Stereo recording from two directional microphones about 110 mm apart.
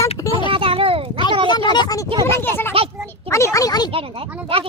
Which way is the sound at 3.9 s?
55° right (ahead or behind).